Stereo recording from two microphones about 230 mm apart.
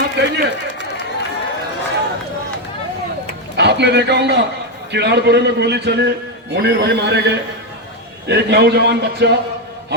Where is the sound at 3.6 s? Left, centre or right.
Right.